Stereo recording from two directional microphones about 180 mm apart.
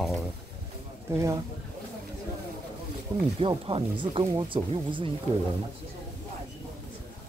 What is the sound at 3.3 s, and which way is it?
Speech, 30° right (ahead or behind).